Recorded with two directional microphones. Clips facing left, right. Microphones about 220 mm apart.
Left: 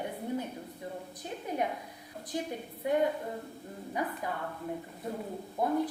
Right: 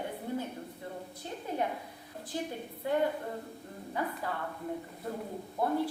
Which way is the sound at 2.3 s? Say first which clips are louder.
Left 1 dB; 15° left (ahead or behind).